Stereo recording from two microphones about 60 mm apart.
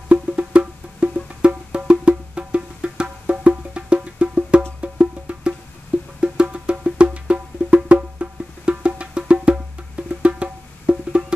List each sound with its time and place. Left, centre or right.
0.1 s music: right